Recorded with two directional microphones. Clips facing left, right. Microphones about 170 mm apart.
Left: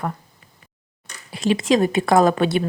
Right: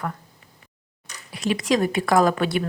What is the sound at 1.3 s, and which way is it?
Speech, 25° left (ahead or behind).